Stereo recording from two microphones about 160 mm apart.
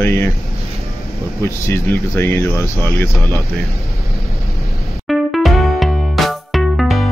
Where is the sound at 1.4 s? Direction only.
15° left (ahead or behind).